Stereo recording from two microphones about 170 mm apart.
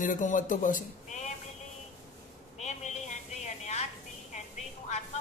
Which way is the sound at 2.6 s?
45° left (ahead or behind).